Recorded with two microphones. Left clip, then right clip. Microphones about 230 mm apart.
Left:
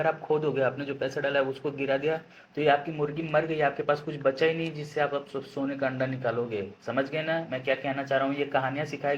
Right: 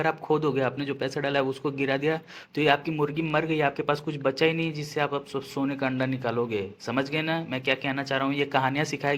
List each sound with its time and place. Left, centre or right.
0.0 s speech: right